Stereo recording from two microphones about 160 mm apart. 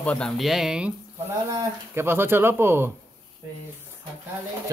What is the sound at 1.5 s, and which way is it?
Speech, 15° right (ahead or behind).